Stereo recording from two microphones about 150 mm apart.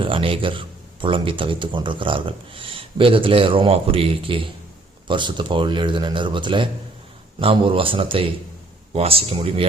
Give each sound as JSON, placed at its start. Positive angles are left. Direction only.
{"t": 0.0, "sound": "a man's voice", "side_deg": -35}